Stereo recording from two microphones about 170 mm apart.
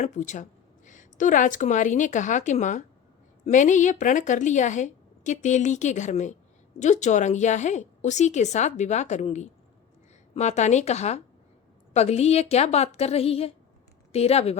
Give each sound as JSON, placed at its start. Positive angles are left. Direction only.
{"t": 0.0, "sound": "a woman's voice", "side_deg": 45}